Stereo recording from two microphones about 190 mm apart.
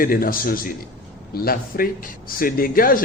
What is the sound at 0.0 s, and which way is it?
A man's voice, 50° left (ahead or behind).